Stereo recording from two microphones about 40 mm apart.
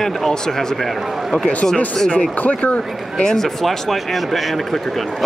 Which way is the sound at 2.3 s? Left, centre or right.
Left.